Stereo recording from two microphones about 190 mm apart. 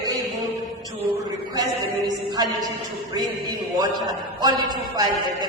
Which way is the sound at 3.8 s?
20° right (ahead or behind).